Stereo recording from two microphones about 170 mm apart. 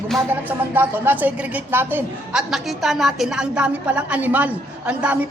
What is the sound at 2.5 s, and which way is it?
A woman's voice, centre (ahead or behind).